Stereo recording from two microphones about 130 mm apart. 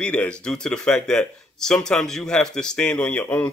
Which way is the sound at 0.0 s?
10° left (ahead or behind).